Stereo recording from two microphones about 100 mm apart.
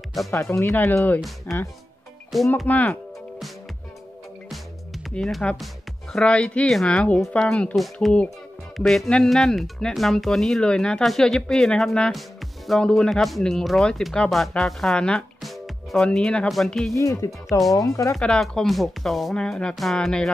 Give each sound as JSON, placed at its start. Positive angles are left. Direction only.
{"t": 0.3, "sound": "speech", "side_deg": 25}
{"t": 1.5, "sound": "speech", "side_deg": 0}
{"t": 2.6, "sound": "speech", "side_deg": 15}
{"t": 4.5, "sound": "music", "side_deg": 5}
{"t": 6.1, "sound": "speech", "side_deg": 10}
{"t": 16.9, "sound": "speech", "side_deg": 30}
{"t": 18.1, "sound": "speech", "side_deg": 5}